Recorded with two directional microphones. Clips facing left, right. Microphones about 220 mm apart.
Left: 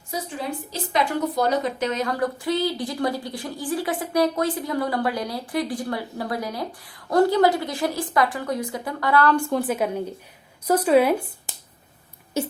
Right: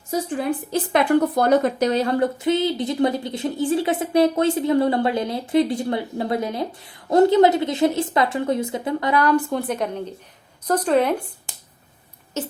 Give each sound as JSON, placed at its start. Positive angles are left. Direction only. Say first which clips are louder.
{"t": 0.1, "sound": "speech", "louder": "right 7 dB", "side_deg": -50}
{"t": 1.9, "sound": "a woman's voice", "louder": "right 5 dB", "side_deg": -30}
{"t": 9.5, "sound": "a woman's voice", "louder": "left 1 dB", "side_deg": 0}
{"t": 12.4, "sound": "speech", "louder": "left 2 dB", "side_deg": 10}